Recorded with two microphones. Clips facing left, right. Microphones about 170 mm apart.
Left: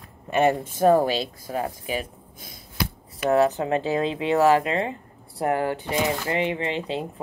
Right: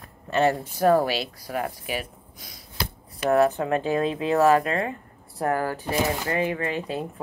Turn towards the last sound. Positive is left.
turn(degrees=25)  # may be behind; listen again after turning